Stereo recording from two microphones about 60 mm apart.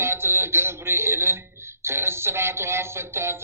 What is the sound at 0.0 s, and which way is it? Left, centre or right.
Music, right.